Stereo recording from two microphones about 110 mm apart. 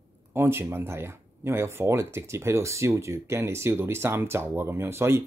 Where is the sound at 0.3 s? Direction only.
20° right (ahead or behind).